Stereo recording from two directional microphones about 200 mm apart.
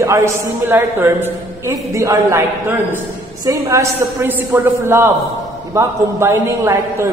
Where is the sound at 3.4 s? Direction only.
15° right (ahead or behind).